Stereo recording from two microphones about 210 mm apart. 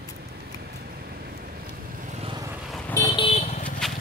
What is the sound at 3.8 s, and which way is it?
Horse, centre (ahead or behind).